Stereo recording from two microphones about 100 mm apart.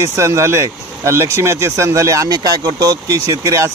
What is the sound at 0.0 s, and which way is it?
Speech, 30° right (ahead or behind).